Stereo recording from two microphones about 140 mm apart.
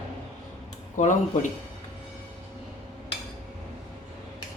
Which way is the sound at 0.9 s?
60° left (ahead or behind).